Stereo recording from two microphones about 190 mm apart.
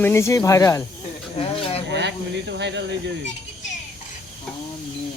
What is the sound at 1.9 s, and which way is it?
Speech, 65° right (ahead or behind).